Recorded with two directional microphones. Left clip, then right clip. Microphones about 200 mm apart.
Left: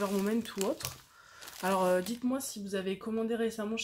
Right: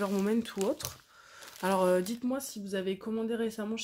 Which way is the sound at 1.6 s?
45° right (ahead or behind).